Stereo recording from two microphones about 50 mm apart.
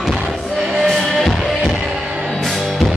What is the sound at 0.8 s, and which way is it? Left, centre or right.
Music, centre.